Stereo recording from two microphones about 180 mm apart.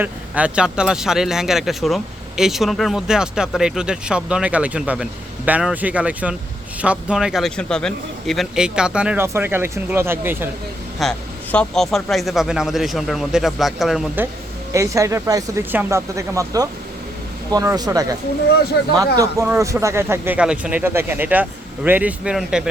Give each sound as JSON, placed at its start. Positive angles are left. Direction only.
{"t": 0.0, "sound": "speech", "side_deg": -5}
{"t": 11.0, "sound": "speech", "side_deg": 0}
{"t": 14.7, "sound": "speech", "side_deg": -15}